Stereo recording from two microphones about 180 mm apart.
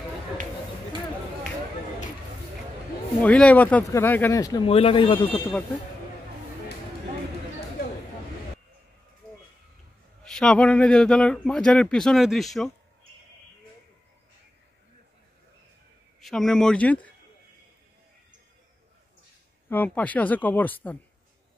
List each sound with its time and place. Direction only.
3.2 s speech: 5° left (ahead or behind)
4.6 s speech: 30° left (ahead or behind)
10.2 s a man's voice: 5° left (ahead or behind)
16.2 s a man's voice: centre (ahead or behind)
19.7 s speech: 10° left (ahead or behind)